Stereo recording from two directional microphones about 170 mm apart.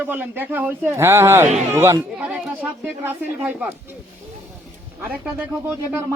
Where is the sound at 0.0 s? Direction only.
10° right (ahead or behind).